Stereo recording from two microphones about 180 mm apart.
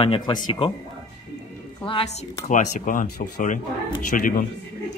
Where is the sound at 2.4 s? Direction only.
45° left (ahead or behind).